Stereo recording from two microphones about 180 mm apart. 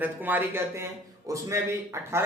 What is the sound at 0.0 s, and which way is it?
Speech, 10° right (ahead or behind).